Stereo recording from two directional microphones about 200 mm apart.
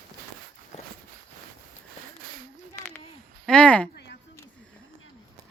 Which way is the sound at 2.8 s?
10° left (ahead or behind).